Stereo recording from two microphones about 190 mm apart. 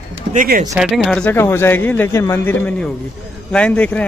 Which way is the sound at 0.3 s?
45° right (ahead or behind).